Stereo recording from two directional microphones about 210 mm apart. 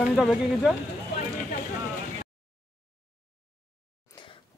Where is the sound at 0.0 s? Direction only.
Centre (ahead or behind).